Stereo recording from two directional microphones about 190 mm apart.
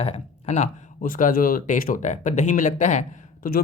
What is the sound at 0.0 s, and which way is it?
Speech, 35° left (ahead or behind).